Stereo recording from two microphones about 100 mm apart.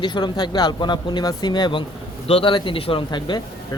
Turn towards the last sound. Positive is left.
turn(degrees=55)  # may be behind; listen again after turning